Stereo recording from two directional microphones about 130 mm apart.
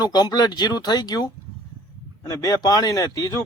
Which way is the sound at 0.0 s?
30° left (ahead or behind).